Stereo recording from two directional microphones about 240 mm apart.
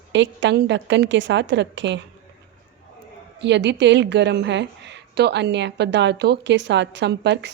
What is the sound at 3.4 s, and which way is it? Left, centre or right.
A woman's voice, right.